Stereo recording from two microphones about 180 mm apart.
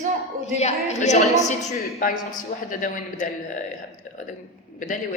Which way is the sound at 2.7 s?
45° left (ahead or behind).